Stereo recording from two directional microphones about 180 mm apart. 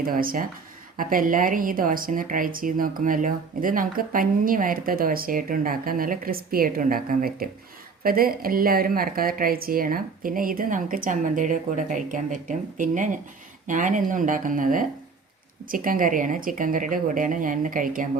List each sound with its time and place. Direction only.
0.0 s speech: 55° right (ahead or behind)